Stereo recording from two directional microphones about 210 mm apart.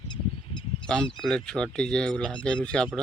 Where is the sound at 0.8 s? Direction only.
5° left (ahead or behind).